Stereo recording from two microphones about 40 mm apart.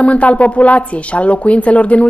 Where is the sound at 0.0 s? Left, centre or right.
Left.